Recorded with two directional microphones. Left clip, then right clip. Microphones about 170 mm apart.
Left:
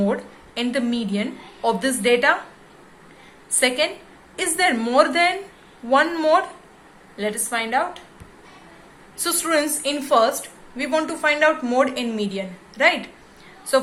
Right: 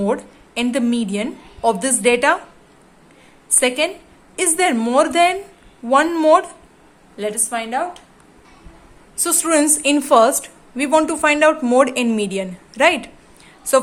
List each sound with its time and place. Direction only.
0.0 s a woman's voice: 45° right (ahead or behind)
3.6 s a woman's voice: 40° right (ahead or behind)
9.1 s a woman's voice: 35° right (ahead or behind); by 13.1 s 55° right (ahead or behind)